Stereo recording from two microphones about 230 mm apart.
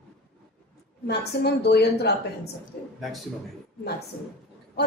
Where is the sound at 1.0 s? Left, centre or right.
Left.